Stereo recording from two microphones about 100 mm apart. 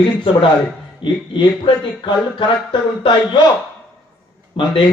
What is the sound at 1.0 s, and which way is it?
Speech, 50° left (ahead or behind).